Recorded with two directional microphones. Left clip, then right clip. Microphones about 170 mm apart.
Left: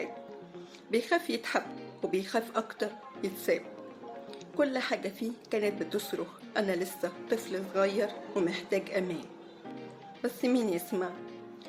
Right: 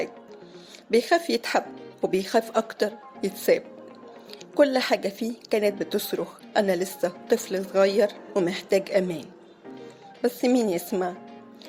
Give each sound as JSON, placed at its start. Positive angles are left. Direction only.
{"t": 0.9, "sound": "a woman's voice", "side_deg": -40}